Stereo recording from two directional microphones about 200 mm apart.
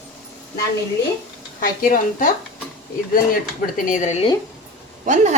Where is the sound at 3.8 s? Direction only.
40° left (ahead or behind).